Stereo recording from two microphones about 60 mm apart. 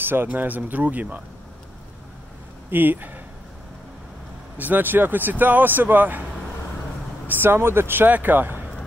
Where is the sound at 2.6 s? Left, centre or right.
Right.